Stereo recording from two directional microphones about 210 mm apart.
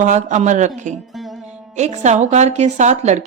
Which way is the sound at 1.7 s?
35° right (ahead or behind).